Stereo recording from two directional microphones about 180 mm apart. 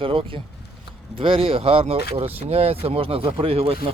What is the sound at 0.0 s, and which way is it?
Speech, 30° right (ahead or behind).